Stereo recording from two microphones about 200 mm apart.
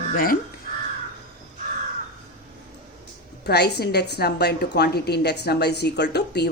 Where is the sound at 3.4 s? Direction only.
55° left (ahead or behind).